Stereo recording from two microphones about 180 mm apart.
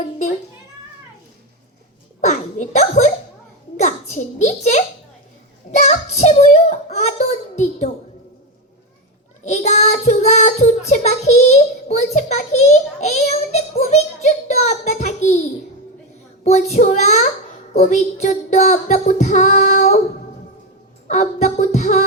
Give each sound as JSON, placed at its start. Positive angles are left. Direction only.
{"t": 2.2, "sound": "a sound", "side_deg": 40}
{"t": 3.8, "sound": "a child's voice", "side_deg": 40}
{"t": 5.8, "sound": "child singing", "side_deg": 40}
{"t": 9.4, "sound": "child singing", "side_deg": 40}
{"t": 16.4, "sound": "a child's voice", "side_deg": 40}
{"t": 17.7, "sound": "child singing", "side_deg": 40}
{"t": 21.1, "sound": "music", "side_deg": 40}